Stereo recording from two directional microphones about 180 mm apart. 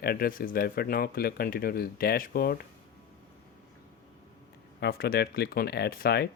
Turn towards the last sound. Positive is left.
turn(degrees=60)  # may be behind; listen again after turning